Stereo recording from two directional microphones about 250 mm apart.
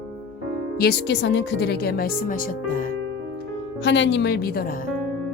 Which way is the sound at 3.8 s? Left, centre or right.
Left.